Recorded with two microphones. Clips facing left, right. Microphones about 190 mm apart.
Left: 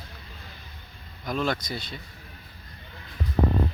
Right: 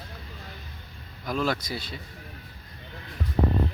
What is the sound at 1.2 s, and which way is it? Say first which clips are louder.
Speech: even; 5° right (ahead or behind).